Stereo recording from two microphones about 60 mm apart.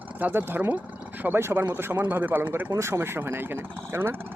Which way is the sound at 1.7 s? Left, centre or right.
Right.